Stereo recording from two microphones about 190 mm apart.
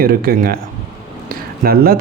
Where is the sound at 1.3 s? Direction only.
50° right (ahead or behind).